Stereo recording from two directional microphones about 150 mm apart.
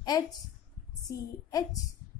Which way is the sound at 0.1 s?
30° left (ahead or behind).